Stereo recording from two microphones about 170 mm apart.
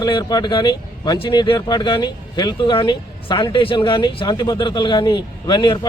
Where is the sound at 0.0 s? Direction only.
25° left (ahead or behind).